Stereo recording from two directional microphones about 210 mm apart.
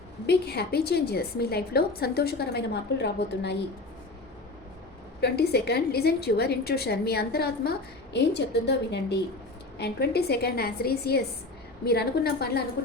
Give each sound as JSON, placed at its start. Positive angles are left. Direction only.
{"t": 0.3, "sound": "a woman's voice", "side_deg": 50}
{"t": 5.2, "sound": "a woman's voice", "side_deg": 50}